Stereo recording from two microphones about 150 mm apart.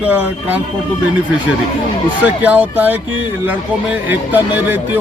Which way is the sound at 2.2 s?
10° right (ahead or behind).